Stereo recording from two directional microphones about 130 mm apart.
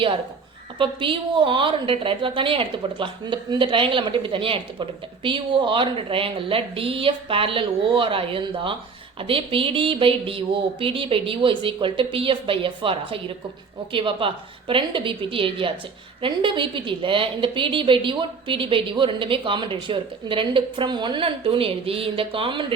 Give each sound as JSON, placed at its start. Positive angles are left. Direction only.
{"t": 0.8, "sound": "a woman's voice", "side_deg": -40}